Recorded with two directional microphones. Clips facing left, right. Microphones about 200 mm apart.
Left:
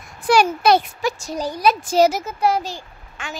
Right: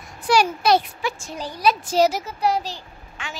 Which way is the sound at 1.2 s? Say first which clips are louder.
Left 2 dB; 40° left (ahead or behind).